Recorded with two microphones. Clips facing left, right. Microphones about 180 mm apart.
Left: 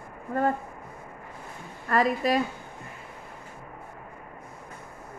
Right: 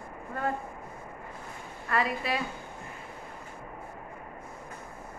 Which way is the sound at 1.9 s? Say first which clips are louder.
Left 6 dB; 40° left (ahead or behind).